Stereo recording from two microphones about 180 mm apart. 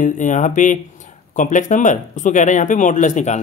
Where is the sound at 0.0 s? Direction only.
45° left (ahead or behind).